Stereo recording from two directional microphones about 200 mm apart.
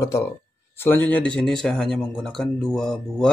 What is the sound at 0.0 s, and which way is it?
Speech, 15° left (ahead or behind).